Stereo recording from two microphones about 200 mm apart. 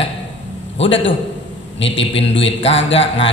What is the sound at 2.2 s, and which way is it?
Speech, 65° left (ahead or behind).